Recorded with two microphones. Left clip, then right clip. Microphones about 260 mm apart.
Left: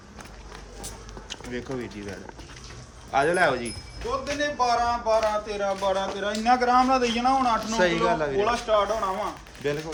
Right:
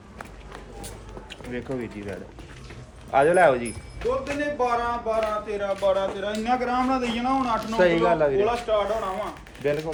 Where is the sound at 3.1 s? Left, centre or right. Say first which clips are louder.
Right 4 dB; centre.